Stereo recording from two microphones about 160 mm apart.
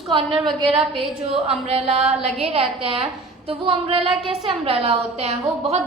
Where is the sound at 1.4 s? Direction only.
40° right (ahead or behind).